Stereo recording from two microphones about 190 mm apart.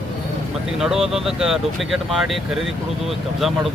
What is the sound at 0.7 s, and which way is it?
Speech, centre (ahead or behind).